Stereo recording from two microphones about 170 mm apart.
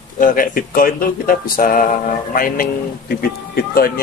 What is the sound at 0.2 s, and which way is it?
Speech, 55° left (ahead or behind).